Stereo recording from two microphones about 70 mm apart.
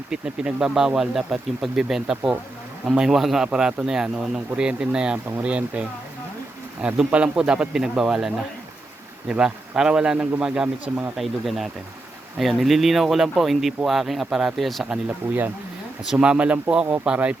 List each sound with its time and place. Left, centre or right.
0.1 s speech: centre
6.8 s speech: centre
9.3 s speech: centre
10.8 s speech: right
11.2 s speech: centre
15.2 s speech: right
16.0 s speech: centre